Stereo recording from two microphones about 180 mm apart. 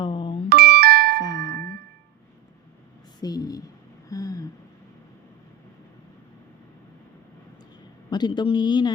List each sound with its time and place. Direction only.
0.0 s doorbell: 25° left (ahead or behind)
0.5 s doorbell: 60° right (ahead or behind)
1.2 s music: 20° left (ahead or behind)
3.2 s a woman's voice: 20° left (ahead or behind)
4.1 s a sound: 20° left (ahead or behind)
8.1 s a woman's voice: 25° left (ahead or behind)